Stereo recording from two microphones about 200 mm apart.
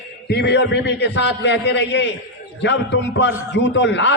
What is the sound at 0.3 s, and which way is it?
A man's voice, 55° left (ahead or behind).